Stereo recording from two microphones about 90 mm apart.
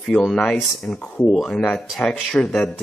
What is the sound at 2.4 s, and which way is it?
Speech, 20° left (ahead or behind).